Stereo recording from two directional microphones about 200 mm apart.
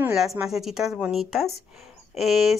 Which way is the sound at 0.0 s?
Centre (ahead or behind).